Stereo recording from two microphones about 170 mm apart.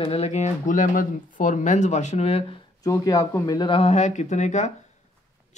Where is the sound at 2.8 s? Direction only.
20° left (ahead or behind).